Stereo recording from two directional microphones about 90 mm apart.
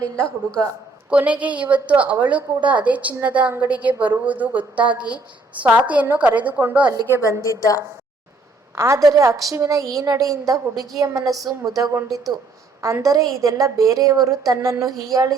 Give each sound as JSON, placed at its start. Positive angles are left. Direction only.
{"t": 0.0, "sound": "a woman's voice", "side_deg": 10}
{"t": 1.1, "sound": "a woman's voice", "side_deg": -15}
{"t": 7.4, "sound": "a woman's voice", "side_deg": 40}
{"t": 8.7, "sound": "a woman's voice", "side_deg": -30}
{"t": 12.0, "sound": "speech", "side_deg": 0}
{"t": 12.8, "sound": "a woman's voice", "side_deg": -35}